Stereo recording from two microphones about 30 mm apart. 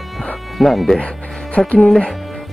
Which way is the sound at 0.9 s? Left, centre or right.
Left.